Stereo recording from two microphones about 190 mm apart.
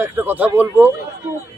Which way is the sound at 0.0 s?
10° right (ahead or behind).